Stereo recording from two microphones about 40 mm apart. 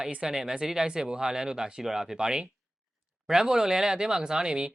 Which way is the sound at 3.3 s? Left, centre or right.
Centre.